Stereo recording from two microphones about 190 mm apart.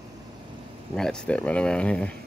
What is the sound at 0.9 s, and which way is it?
Speech, 5° left (ahead or behind).